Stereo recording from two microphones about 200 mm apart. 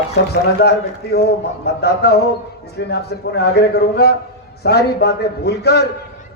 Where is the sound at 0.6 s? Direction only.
55° left (ahead or behind).